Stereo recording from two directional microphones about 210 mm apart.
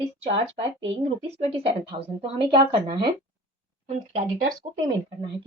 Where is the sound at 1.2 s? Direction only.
30° right (ahead or behind).